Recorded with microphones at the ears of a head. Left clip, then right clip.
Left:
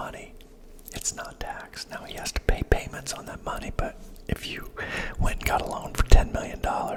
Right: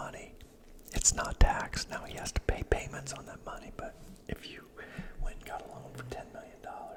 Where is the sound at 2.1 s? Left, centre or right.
Left.